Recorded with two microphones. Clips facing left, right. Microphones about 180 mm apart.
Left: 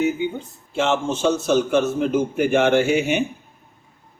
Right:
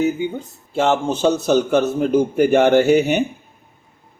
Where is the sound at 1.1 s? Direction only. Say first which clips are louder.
Right 3 dB; 35° right (ahead or behind).